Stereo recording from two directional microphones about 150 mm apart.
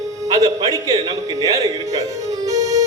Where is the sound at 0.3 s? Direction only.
25° right (ahead or behind).